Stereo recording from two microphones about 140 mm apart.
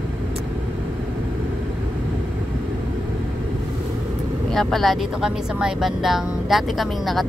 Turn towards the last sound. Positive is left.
turn(degrees=0)  # may be behind; listen again after turning